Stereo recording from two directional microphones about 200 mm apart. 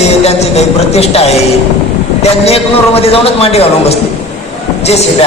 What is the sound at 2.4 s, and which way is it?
A man's voice, 30° left (ahead or behind).